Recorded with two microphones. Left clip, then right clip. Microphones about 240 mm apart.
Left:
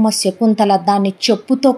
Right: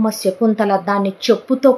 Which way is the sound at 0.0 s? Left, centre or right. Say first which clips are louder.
Left 1 dB; left.